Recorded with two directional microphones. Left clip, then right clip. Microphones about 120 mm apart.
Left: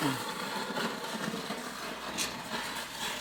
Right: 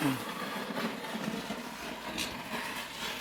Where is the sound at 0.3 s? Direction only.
5° right (ahead or behind).